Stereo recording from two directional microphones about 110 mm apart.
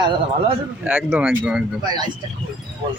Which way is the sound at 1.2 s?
10° right (ahead or behind).